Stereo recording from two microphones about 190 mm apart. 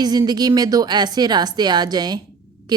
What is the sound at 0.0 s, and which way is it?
Speech, 20° right (ahead or behind).